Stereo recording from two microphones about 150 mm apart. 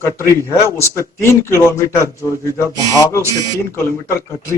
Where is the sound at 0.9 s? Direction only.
20° left (ahead or behind).